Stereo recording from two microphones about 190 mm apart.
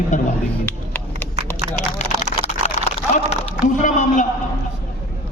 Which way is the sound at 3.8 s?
40° left (ahead or behind).